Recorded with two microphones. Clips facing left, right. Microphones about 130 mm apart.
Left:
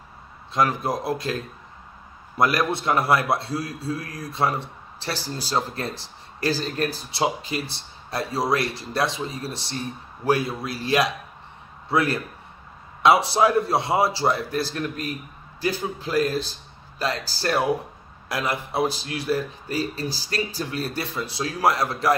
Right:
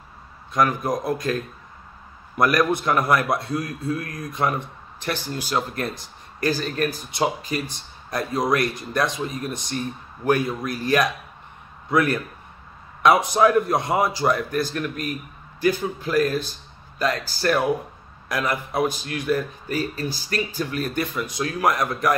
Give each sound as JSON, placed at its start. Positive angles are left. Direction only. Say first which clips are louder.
{"t": 0.5, "sound": "a man's voice", "louder": "right 1 dB", "side_deg": 25}